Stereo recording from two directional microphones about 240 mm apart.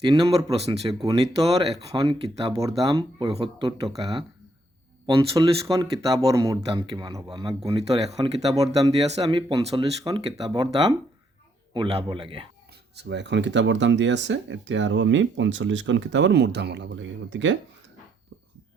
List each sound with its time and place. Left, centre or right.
0.0 s speech: centre
8.4 s speech: centre
13.0 s speech: right